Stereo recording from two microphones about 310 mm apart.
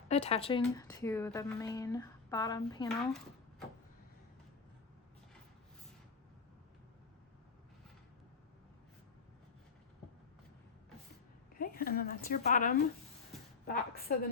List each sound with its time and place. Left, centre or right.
0.1 s a woman's voice: centre
11.5 s a woman's voice: left